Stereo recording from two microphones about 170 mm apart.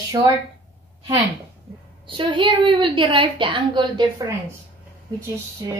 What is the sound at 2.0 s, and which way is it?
A woman's voice, 30° right (ahead or behind).